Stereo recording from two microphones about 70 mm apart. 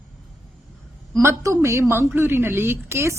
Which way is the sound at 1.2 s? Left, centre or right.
Right.